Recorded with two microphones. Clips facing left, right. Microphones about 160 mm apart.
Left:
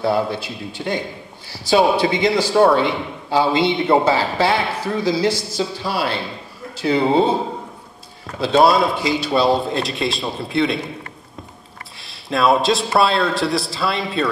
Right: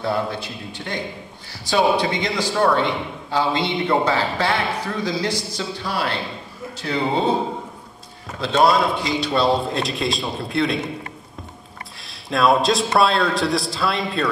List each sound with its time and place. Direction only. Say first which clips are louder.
0.0 s a man's voice: left 4 dB; 5° left (ahead or behind)
8.4 s a man's voice: left 3 dB; 5° left (ahead or behind)
12.0 s a man's voice: left 1 dB; centre (ahead or behind)